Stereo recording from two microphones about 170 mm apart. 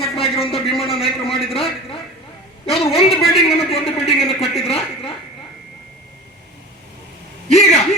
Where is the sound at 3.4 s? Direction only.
35° left (ahead or behind).